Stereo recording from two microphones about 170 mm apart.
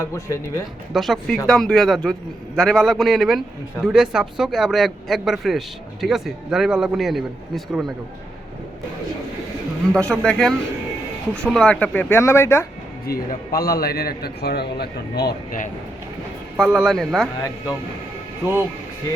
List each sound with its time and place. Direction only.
0.0 s speech: 15° left (ahead or behind)
0.9 s a man's voice: centre (ahead or behind)
9.9 s a man's voice: 5° left (ahead or behind)
13.1 s a man's voice: 65° left (ahead or behind)
15.3 s speech: 50° left (ahead or behind)
16.6 s a man's voice: centre (ahead or behind)
17.3 s a man's voice: 20° left (ahead or behind)